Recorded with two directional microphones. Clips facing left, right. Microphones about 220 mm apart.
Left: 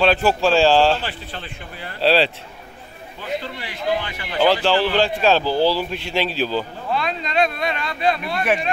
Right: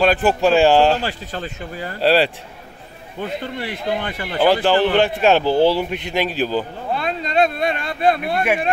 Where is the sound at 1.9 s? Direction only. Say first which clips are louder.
Right 1 dB; 10° right (ahead or behind).